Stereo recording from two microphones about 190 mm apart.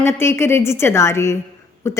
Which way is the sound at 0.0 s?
15° left (ahead or behind).